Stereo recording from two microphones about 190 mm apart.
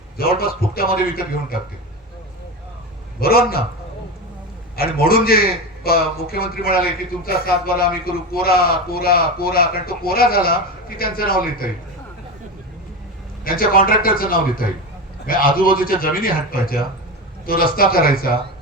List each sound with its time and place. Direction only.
0.2 s a man's voice: 50° left (ahead or behind)
3.2 s a man's voice: 50° left (ahead or behind)
4.8 s a man's voice: 55° left (ahead or behind)
13.4 s a man's voice: 50° left (ahead or behind)